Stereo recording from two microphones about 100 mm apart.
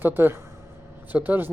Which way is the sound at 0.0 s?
20° right (ahead or behind).